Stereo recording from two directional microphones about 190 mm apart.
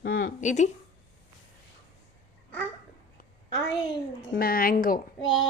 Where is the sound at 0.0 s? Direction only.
50° left (ahead or behind).